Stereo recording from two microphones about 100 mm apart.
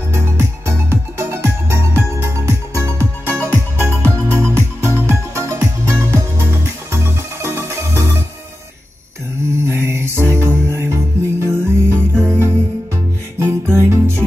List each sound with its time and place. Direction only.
0.1 s music: 30° right (ahead or behind)
9.7 s music: 25° right (ahead or behind)